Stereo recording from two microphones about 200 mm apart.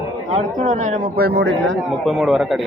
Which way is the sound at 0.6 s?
35° right (ahead or behind).